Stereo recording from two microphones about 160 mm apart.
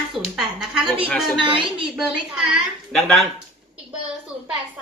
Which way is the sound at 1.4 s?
30° right (ahead or behind).